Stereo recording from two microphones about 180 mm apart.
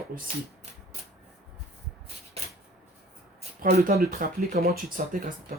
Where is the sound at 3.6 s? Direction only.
55° right (ahead or behind).